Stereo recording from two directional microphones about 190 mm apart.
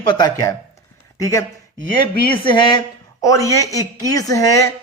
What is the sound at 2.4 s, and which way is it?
Speech, 25° left (ahead or behind).